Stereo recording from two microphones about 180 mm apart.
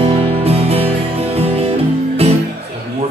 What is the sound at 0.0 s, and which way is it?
Music, 35° right (ahead or behind).